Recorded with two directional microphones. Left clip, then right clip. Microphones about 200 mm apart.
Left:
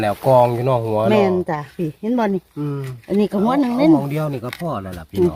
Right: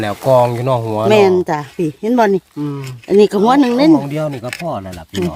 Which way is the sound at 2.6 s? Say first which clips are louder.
Right 3 dB; centre (ahead or behind).